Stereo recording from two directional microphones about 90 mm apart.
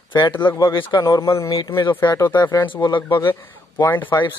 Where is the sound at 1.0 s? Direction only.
35° left (ahead or behind).